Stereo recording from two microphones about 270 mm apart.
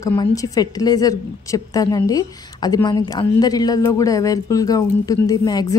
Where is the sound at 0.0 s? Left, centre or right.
Centre.